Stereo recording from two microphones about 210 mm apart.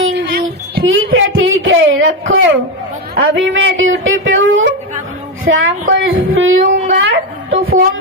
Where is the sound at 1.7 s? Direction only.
65° right (ahead or behind).